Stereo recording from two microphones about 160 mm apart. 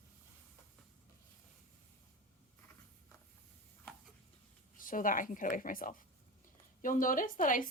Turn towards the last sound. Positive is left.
turn(degrees=55)  # may be behind; listen again after turning